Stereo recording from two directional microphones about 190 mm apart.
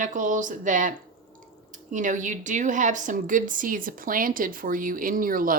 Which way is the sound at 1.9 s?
40° right (ahead or behind).